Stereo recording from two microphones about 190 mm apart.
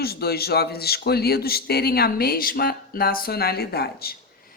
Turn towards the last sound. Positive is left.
turn(degrees=55)  # may be behind; listen again after turning